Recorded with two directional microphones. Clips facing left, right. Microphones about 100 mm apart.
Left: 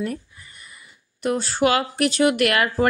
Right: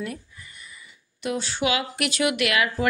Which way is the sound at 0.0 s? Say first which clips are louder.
Left 5 dB; 40° left (ahead or behind).